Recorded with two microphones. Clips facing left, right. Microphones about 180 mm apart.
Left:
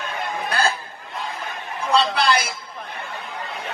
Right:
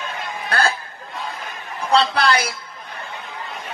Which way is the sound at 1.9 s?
60° right (ahead or behind).